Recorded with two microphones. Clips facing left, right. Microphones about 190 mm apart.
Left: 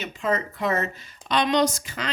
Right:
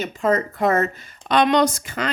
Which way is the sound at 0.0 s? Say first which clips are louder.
Right 6 dB; 45° right (ahead or behind).